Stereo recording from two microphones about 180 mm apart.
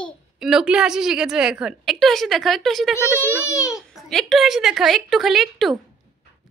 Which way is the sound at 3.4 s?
15° left (ahead or behind).